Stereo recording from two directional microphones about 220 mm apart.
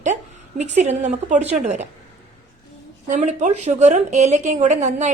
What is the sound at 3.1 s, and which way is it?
A woman's voice, 35° right (ahead or behind).